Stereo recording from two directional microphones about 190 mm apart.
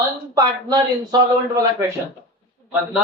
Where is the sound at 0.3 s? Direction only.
20° right (ahead or behind).